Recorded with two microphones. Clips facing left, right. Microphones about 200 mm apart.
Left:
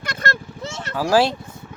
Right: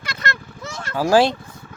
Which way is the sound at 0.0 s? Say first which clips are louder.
Left 2 dB; 50° left (ahead or behind).